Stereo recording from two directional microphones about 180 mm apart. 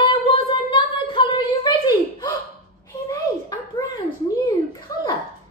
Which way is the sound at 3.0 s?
20° left (ahead or behind).